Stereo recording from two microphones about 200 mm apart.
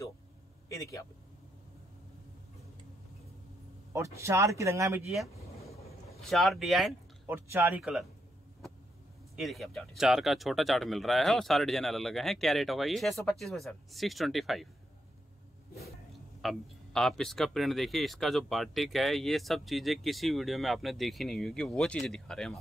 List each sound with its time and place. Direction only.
0.7 s a sound: 15° left (ahead or behind)
3.9 s speech: 15° right (ahead or behind)
5.0 s vehicle: centre (ahead or behind)
6.2 s speech: centre (ahead or behind)
9.4 s speech: centre (ahead or behind)
16.3 s speech: centre (ahead or behind)